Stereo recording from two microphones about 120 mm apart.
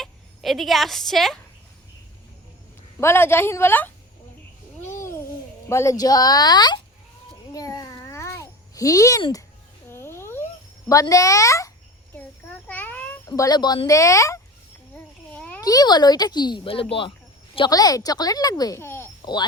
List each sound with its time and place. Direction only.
0.0 s speech: centre (ahead or behind)
3.0 s a woman's voice: 20° left (ahead or behind)
4.8 s babbling: 20° left (ahead or behind)
5.6 s a woman's voice: 25° left (ahead or behind)
7.5 s babbling: 30° left (ahead or behind)
9.9 s a sound: 20° left (ahead or behind)
11.1 s a woman's voice: 25° left (ahead or behind)
12.1 s a sound: 15° left (ahead or behind)
13.3 s a woman's voice: 30° left (ahead or behind)
14.9 s a sound: 15° left (ahead or behind)
15.6 s a woman's voice: 35° left (ahead or behind)
17.7 s a woman's voice: 30° left (ahead or behind)
18.8 s a sound: 20° left (ahead or behind)
19.2 s speech: 35° left (ahead or behind)